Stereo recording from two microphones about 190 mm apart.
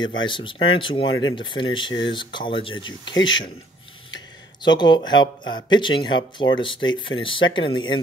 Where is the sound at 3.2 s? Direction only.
80° left.